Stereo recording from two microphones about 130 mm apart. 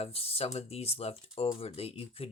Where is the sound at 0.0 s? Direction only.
50° left (ahead or behind).